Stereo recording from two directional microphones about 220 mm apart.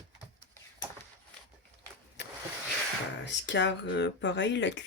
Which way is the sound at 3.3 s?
55° left (ahead or behind).